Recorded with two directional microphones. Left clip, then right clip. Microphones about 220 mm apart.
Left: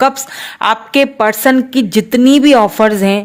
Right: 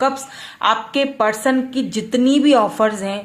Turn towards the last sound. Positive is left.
turn(degrees=45)  # may be behind; listen again after turning